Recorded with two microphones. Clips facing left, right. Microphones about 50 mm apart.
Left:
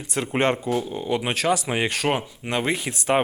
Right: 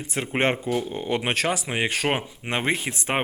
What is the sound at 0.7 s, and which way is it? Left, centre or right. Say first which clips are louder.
Speech: left 1 dB; right.